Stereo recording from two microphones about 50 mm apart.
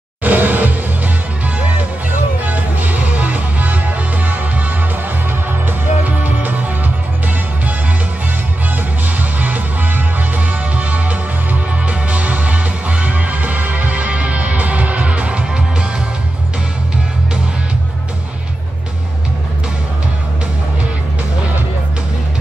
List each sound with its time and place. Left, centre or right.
0.2 s music: right
9.4 s music: right